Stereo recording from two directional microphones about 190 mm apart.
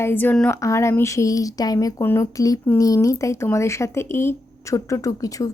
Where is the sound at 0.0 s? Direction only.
10° left (ahead or behind).